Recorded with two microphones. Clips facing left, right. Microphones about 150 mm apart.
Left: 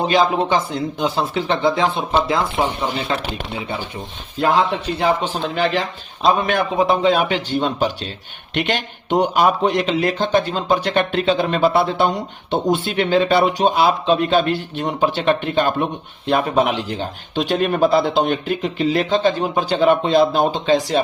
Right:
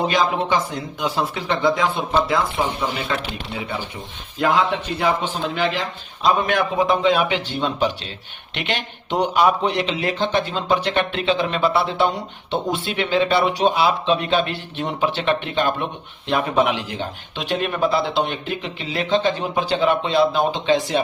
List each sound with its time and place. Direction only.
0.1 s speech: 25° left (ahead or behind)
4.4 s a man's voice: 35° left (ahead or behind)